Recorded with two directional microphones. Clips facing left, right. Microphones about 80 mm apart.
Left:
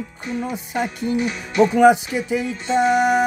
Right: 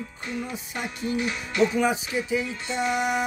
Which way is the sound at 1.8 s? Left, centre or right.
Left.